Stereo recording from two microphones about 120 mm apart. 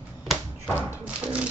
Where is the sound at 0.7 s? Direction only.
10° right (ahead or behind).